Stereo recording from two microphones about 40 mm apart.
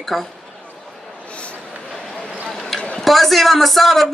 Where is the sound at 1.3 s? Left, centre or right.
Left.